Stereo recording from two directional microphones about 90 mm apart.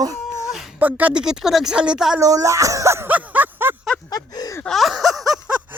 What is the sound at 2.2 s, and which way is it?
Speech, 40° right (ahead or behind).